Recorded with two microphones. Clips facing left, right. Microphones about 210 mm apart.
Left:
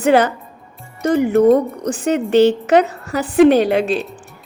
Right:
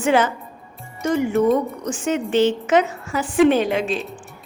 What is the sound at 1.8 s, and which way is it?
A woman's voice, 35° left (ahead or behind).